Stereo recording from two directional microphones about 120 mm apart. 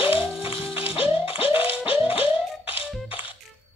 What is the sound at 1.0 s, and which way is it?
Music, 50° left (ahead or behind).